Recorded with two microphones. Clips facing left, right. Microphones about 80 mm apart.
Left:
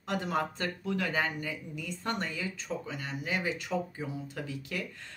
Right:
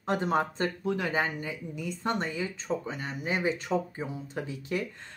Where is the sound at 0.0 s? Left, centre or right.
Right.